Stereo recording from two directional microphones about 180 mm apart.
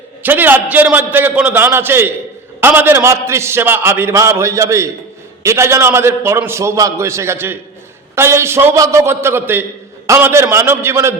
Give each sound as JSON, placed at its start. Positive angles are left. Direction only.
{"t": 0.2, "sound": "a man's voice", "side_deg": -10}